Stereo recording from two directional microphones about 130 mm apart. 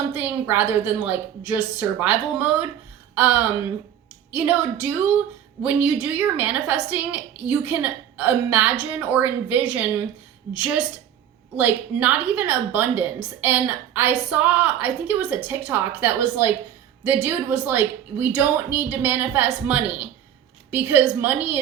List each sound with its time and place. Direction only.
0.1 s a woman's voice: 15° right (ahead or behind)
4.3 s a woman's voice: 10° right (ahead or behind)
11.5 s a woman's voice: 10° right (ahead or behind)